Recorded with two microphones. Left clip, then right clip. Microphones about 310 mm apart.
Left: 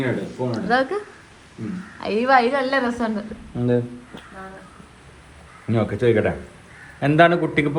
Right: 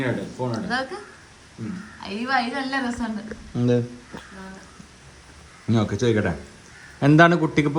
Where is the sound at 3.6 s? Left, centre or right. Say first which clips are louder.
Left 1 dB; right.